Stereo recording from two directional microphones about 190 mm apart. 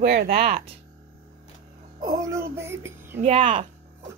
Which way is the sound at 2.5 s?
15° right (ahead or behind).